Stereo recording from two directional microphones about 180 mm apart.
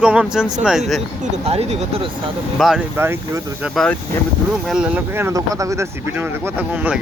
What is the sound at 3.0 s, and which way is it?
Speech, 15° right (ahead or behind).